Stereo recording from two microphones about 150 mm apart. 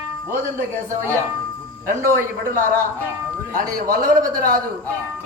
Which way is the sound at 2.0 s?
20° right (ahead or behind).